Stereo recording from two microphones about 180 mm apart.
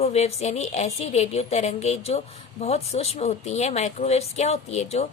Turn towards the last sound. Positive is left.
turn(degrees=35)  # may be behind; listen again after turning